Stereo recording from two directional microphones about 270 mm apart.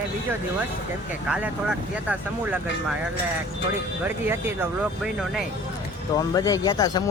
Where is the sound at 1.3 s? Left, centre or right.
Centre.